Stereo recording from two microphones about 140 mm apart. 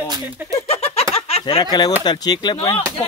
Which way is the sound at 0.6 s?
45° left (ahead or behind).